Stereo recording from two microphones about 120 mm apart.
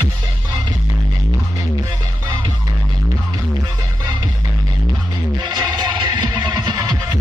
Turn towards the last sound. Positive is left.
turn(degrees=-35)  # may be behind; listen again after turning